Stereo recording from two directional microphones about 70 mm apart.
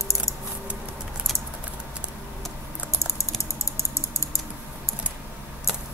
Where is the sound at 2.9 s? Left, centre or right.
Left.